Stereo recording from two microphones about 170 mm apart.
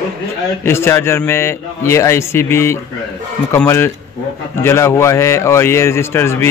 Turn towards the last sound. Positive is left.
turn(degrees=15)  # may be behind; listen again after turning